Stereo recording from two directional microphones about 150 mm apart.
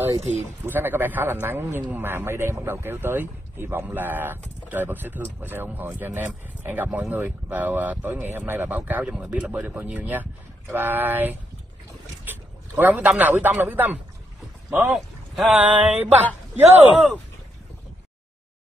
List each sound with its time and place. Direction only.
0.7 s a man's voice: 15° right (ahead or behind)
14.8 s speech: centre (ahead or behind)
16.5 s speech: 45° right (ahead or behind)